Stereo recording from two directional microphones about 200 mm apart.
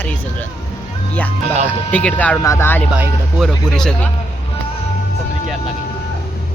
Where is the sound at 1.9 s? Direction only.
10° left (ahead or behind).